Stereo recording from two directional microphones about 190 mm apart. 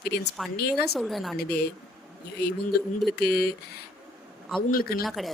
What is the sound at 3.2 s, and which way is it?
Speech, 55° left (ahead or behind).